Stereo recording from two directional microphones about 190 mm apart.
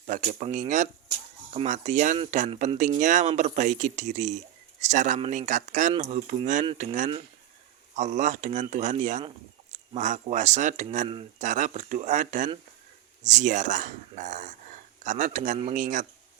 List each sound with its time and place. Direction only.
0.0 s speech: 40° right (ahead or behind)